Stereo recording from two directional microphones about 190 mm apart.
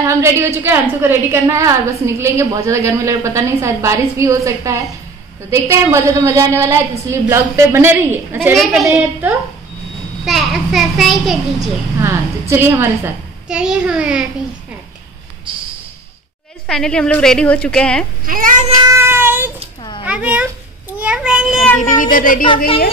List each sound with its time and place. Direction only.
0.1 s a woman's voice: 15° right (ahead or behind)
11.6 s a woman's voice: 15° right (ahead or behind)
16.6 s a woman's voice: 5° left (ahead or behind)
18.2 s speech: 45° right (ahead or behind)
18.9 s child singing: 15° right (ahead or behind)
20.1 s speech: 5° right (ahead or behind)
21.0 s a sound: 5° right (ahead or behind)
21.7 s speech: 45° left (ahead or behind)